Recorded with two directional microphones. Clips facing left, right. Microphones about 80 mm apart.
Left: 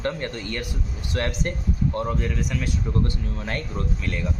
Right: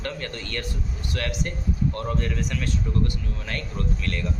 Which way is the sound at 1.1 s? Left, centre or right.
Left.